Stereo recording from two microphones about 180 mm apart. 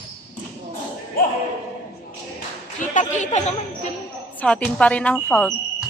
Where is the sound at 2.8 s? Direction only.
45° left (ahead or behind).